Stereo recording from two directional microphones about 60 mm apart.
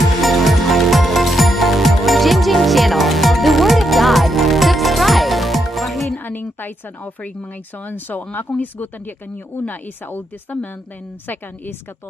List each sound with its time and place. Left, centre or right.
0.2 s music: centre
6.1 s a sound: left
7.8 s a woman's voice: left